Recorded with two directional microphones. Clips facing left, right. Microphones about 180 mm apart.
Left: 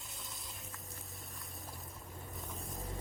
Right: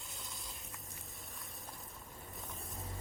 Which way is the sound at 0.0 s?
Centre (ahead or behind).